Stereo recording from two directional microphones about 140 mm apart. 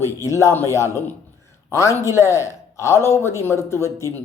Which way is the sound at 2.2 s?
20° left (ahead or behind).